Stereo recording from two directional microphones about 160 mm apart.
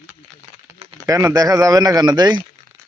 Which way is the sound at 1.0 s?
20° right (ahead or behind).